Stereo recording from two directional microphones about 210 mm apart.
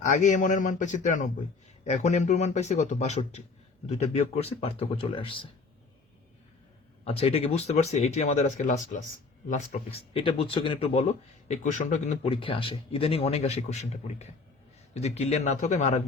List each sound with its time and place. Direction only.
0.0 s speech: 35° left (ahead or behind)
7.0 s speech: 30° left (ahead or behind)